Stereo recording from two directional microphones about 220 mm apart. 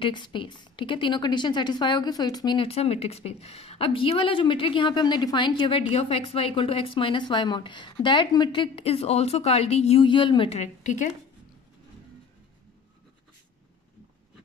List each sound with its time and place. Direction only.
0.0 s a woman's voice: 20° left (ahead or behind)